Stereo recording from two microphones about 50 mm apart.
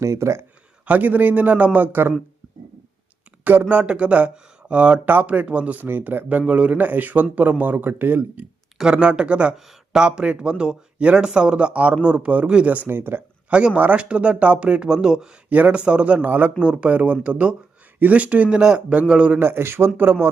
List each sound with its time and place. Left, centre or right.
0.0 s speech: right
0.9 s speech: right
3.4 s speech: right
3.7 s speech: right
5.0 s speech: right
8.8 s speech: centre
12.9 s speech: right
13.5 s speech: right
15.4 s speech: right
15.7 s speech: right
18.4 s speech: centre
19.4 s speech: right